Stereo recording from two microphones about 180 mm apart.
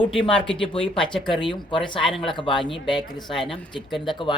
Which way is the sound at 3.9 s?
Centre (ahead or behind).